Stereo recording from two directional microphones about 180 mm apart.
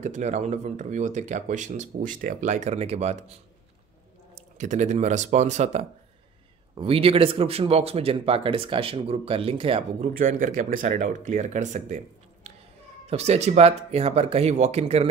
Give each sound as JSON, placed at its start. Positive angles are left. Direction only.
{"t": 0.0, "sound": "speech", "side_deg": -40}
{"t": 4.4, "sound": "speech", "side_deg": -40}
{"t": 10.1, "sound": "speech", "side_deg": -50}
{"t": 13.0, "sound": "speech", "side_deg": -35}